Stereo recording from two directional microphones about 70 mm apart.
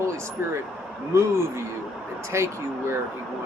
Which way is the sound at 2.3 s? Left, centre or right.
Right.